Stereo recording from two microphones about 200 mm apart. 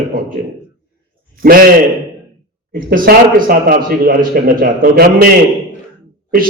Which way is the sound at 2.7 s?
45° right (ahead or behind).